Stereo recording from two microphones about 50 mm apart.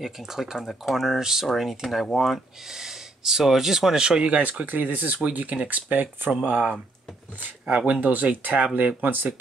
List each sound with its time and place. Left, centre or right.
0.0 s speech: centre; by 6.3 s right
7.9 s speech: right